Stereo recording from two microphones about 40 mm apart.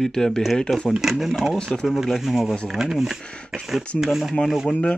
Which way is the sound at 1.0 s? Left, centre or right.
Centre.